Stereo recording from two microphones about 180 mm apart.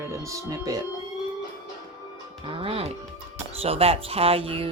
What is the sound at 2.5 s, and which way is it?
Speech, 30° right (ahead or behind).